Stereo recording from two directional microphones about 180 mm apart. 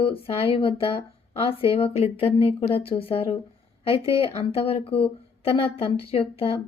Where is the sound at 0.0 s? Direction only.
30° left (ahead or behind).